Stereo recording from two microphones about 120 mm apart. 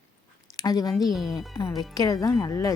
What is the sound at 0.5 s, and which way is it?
Speech, 30° left (ahead or behind).